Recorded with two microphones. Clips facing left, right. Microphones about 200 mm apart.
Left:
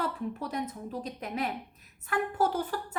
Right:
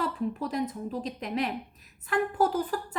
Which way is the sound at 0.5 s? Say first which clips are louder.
Right 4 dB; 90° right.